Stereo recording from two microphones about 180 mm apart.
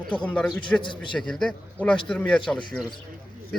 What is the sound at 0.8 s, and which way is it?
Speech, 25° left (ahead or behind).